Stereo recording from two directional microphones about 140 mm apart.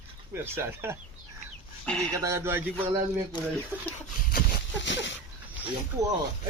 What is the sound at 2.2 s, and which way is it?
Speech, 20° right (ahead or behind).